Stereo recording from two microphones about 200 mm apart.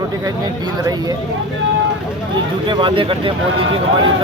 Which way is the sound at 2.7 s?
25° right (ahead or behind).